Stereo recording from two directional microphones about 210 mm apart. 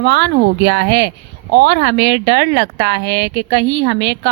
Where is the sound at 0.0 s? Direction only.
55° right (ahead or behind).